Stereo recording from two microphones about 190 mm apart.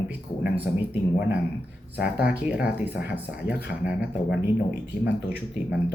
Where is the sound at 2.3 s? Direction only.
5° right (ahead or behind).